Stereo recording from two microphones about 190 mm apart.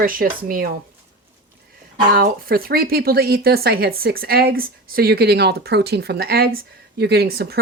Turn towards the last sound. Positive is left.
turn(degrees=-55)  # may be behind; listen again after turning